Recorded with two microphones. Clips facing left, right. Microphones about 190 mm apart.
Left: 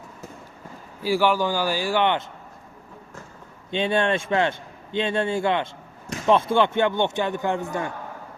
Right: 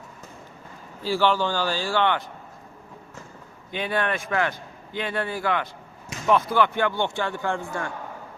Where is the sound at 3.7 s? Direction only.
25° left (ahead or behind).